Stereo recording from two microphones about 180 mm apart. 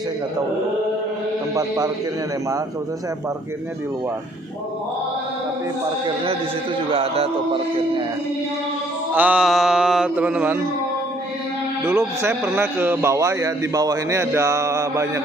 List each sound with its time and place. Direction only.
1.5 s a man's voice: 20° right (ahead or behind)
6.9 s a man's voice: 30° right (ahead or behind)
9.1 s mantra: 5° right (ahead or behind)
11.8 s a man's voice: 15° right (ahead or behind)